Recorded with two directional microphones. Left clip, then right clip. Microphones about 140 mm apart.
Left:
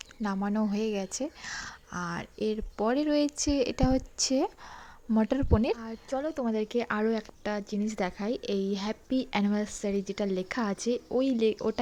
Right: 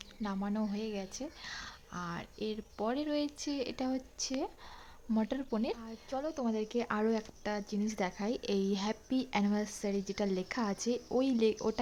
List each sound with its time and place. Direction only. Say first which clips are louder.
0.2 s speech: left 7 dB; 40° left (ahead or behind)
5.1 s speech: left 8 dB; 35° left (ahead or behind)
6.1 s speech: left 5 dB; 20° left (ahead or behind)